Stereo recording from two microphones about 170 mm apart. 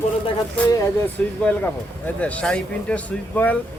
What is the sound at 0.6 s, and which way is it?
Speech, 5° left (ahead or behind).